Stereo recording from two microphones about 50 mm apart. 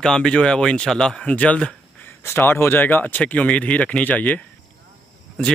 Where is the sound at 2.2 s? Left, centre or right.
Left.